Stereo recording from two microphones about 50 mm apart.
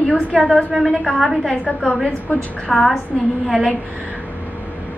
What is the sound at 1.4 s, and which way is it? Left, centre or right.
Speech, centre.